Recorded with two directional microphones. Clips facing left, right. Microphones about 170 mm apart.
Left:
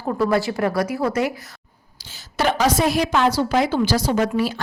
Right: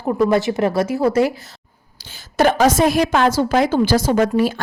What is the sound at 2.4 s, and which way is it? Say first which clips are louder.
A woman's voice: right 5 dB; 50° right (ahead or behind).